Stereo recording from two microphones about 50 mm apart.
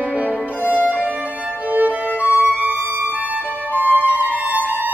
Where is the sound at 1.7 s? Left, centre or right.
Right.